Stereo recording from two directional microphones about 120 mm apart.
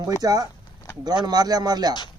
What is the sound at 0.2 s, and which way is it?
A man's voice, 30° right (ahead or behind).